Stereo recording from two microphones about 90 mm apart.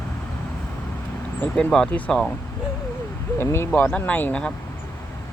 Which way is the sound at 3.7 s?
20° left (ahead or behind).